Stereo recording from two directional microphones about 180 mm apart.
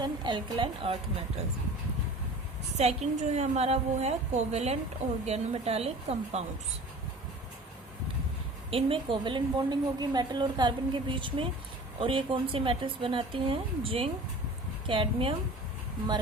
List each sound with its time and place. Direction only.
0.0 s a woman's voice: 25° right (ahead or behind)
2.7 s a woman's voice: 40° right (ahead or behind)
8.7 s a woman's voice: 30° right (ahead or behind)